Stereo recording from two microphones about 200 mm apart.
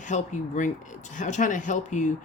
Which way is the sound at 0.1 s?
40° left (ahead or behind).